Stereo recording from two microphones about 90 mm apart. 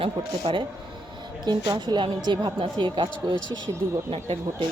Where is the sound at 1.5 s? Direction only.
55° right (ahead or behind).